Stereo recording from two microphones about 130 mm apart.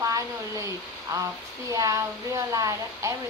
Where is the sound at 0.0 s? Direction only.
25° right (ahead or behind).